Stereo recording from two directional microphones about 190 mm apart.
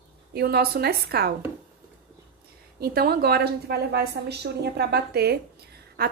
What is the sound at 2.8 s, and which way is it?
A woman's voice, 55° right (ahead or behind).